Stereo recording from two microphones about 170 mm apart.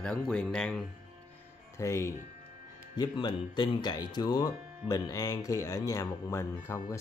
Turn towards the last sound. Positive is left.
turn(degrees=15)  # may be behind; listen again after turning